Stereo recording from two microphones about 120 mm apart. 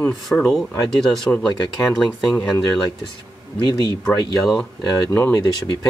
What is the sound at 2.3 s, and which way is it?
Speech, 30° left (ahead or behind).